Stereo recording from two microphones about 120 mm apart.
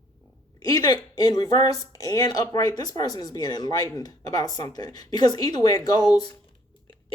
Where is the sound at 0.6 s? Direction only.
35° left (ahead or behind).